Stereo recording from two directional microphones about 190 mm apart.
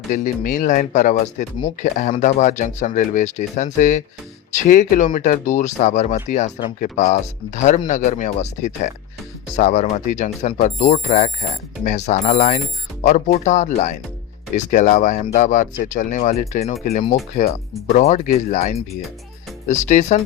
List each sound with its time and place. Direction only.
0.1 s speech: 45° left (ahead or behind)